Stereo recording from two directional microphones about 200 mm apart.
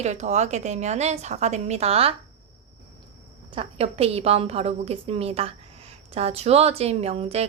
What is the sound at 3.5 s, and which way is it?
A woman's voice, 30° right (ahead or behind).